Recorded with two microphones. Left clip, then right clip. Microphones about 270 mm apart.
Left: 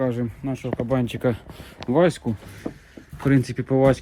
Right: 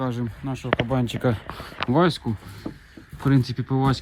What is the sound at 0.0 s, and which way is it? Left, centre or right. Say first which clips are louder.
Speech: left 4 dB; centre.